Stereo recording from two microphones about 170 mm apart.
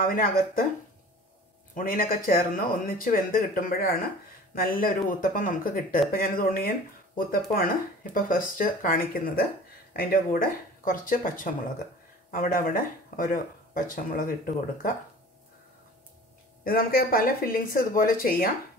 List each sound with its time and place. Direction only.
0.0 s speech: 55° left (ahead or behind)
1.8 s speech: 55° left (ahead or behind)
16.6 s speech: 60° left (ahead or behind)